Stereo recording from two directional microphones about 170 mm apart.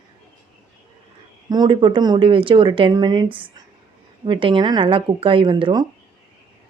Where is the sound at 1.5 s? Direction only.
25° right (ahead or behind).